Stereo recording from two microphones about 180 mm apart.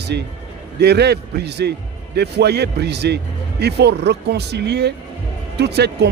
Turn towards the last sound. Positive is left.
turn(degrees=-65)  # may be behind; listen again after turning